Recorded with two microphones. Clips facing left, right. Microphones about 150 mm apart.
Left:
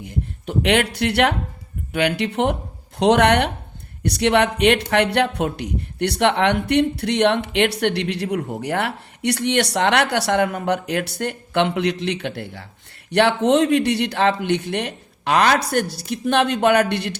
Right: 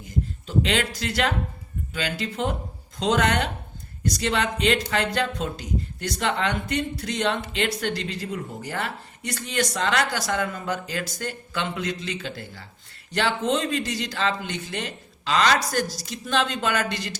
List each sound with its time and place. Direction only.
0.0 s speech: 65° left (ahead or behind)